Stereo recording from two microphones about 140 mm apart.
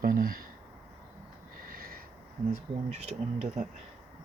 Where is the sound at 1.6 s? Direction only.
90° right.